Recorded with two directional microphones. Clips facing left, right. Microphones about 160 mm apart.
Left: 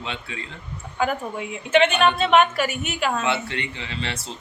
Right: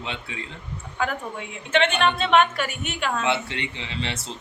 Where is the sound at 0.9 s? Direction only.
10° left (ahead or behind).